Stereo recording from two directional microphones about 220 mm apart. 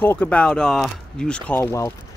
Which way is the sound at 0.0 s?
10° left (ahead or behind).